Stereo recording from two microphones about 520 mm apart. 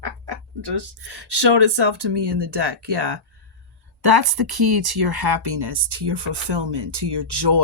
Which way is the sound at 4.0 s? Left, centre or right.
Right.